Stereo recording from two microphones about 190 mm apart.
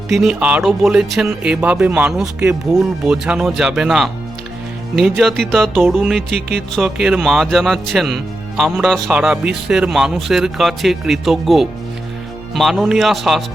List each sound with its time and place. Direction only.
0.1 s speech: centre (ahead or behind)
2.7 s speech: 5° right (ahead or behind)